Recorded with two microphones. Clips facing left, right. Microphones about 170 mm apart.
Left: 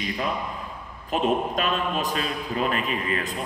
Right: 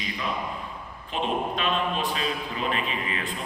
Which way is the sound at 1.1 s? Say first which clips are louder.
Left 4 dB; 45° left (ahead or behind).